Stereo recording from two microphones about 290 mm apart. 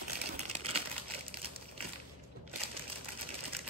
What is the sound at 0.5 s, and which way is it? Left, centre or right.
Crumpling, right.